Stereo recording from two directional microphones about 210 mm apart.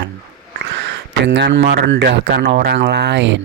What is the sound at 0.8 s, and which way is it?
Speech, 55° right (ahead or behind).